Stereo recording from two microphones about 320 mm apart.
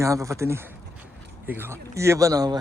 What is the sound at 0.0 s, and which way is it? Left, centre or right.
A man's voice, centre.